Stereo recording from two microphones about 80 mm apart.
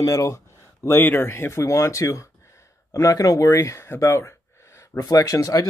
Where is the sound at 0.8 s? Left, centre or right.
Left.